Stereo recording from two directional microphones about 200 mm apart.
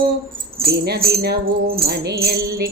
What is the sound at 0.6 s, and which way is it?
Music, 50° right (ahead or behind).